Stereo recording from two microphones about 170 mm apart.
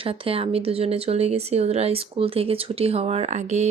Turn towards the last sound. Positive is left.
turn(degrees=-40)  # may be behind; listen again after turning